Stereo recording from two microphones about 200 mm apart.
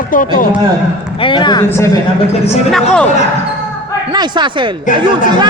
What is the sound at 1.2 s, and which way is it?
Speech, 25° left (ahead or behind).